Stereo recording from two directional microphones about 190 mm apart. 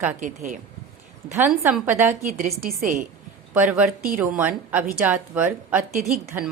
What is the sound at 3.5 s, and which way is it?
A woman's voice, 5° right (ahead or behind).